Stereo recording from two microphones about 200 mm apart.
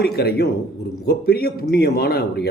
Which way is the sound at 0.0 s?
50° left (ahead or behind).